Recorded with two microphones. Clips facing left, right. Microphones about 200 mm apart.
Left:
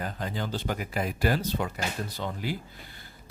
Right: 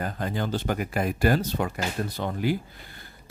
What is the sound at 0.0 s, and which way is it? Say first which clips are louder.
Speech: right 4 dB; 50° right (ahead or behind).